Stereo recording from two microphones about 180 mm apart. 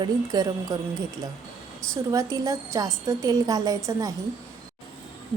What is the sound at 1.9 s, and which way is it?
A woman's voice, 20° right (ahead or behind).